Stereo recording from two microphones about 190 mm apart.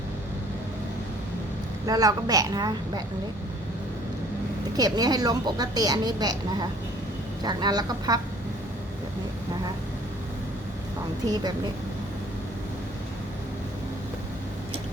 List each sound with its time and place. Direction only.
1.9 s speech: 20° right (ahead or behind)
4.8 s speech: 20° right (ahead or behind)
11.3 s speech: 20° right (ahead or behind)